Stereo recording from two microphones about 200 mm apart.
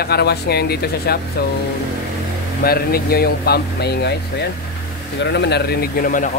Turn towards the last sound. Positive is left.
turn(degrees=40)  # may be behind; listen again after turning